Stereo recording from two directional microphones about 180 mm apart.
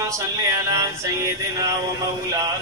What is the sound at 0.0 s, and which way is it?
Male singing, 15° right (ahead or behind).